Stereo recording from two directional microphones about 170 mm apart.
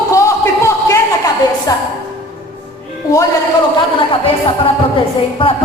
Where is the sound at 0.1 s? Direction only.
20° left (ahead or behind).